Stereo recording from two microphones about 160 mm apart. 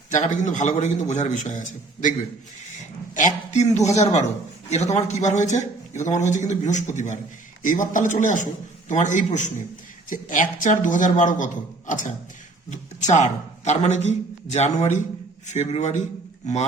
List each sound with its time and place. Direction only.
0.1 s a man's voice: 50° left (ahead or behind)
3.2 s a man's voice: 50° left (ahead or behind)